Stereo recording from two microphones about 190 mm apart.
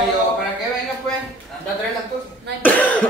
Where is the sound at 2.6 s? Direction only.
10° left (ahead or behind).